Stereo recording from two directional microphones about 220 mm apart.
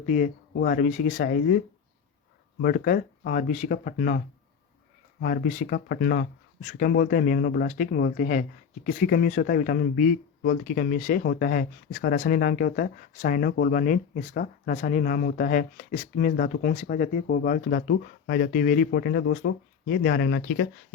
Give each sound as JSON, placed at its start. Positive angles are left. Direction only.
{"t": 0.0, "sound": "speech", "side_deg": 35}
{"t": 5.2, "sound": "speech", "side_deg": 40}
{"t": 6.6, "sound": "speech", "side_deg": 35}